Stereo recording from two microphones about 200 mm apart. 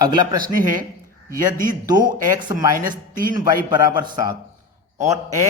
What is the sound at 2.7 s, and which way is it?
Speech, 45° right (ahead or behind).